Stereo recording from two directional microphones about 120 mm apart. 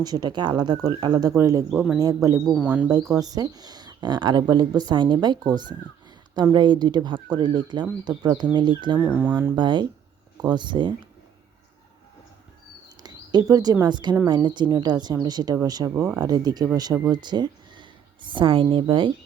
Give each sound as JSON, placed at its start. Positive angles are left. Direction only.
{"t": 0.0, "sound": "speech", "side_deg": -35}
{"t": 1.4, "sound": "speech", "side_deg": -25}
{"t": 2.6, "sound": "speech", "side_deg": -10}
{"t": 3.0, "sound": "speech", "side_deg": -30}
{"t": 9.0, "sound": "speech", "side_deg": -15}
{"t": 9.6, "sound": "speech", "side_deg": -40}
{"t": 13.0, "sound": "a sound", "side_deg": -35}
{"t": 13.8, "sound": "speech", "side_deg": -40}